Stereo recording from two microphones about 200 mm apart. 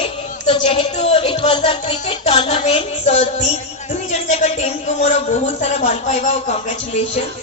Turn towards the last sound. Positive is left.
turn(degrees=30)  # may be behind; listen again after turning